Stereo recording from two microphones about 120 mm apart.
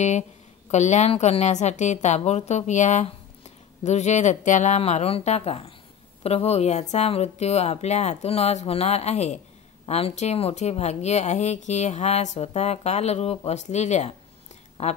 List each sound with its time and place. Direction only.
0.7 s a woman's voice: 70° left (ahead or behind)